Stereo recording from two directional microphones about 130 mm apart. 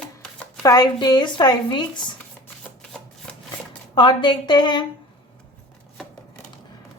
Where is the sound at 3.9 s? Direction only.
35° left (ahead or behind).